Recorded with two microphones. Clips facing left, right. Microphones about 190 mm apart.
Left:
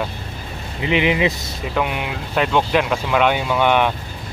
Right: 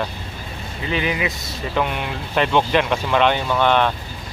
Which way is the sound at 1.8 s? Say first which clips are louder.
Left 1 dB; 5° left (ahead or behind).